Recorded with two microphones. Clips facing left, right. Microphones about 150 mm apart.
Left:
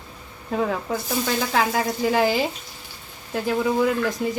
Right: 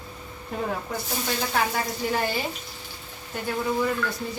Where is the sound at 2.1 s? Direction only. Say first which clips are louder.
Left 7 dB; 90° left.